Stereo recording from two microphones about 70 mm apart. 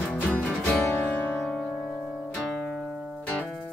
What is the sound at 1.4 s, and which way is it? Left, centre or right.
Music, centre.